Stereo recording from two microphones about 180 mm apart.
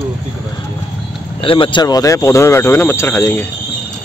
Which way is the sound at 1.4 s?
30° left (ahead or behind).